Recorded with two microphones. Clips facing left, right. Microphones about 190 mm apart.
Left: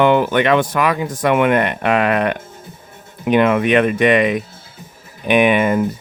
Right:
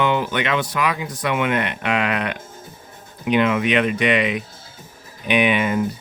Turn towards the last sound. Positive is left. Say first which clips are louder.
# left 5 dB
turn(degrees=50)  # may be behind; listen again after turning